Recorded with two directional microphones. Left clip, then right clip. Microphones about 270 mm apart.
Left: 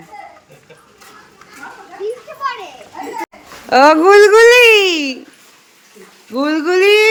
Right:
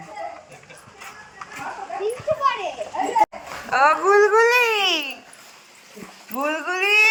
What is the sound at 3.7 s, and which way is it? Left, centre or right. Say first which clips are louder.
Speech: left 9 dB; left.